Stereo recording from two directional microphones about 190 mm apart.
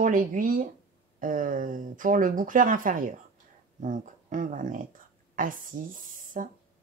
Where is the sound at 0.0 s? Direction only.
45° right (ahead or behind).